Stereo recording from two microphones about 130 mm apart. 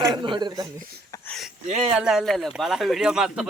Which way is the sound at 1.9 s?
5° right (ahead or behind).